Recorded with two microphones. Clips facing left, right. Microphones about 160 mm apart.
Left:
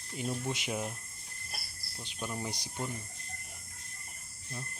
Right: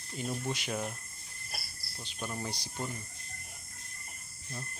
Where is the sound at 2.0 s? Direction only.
10° left (ahead or behind).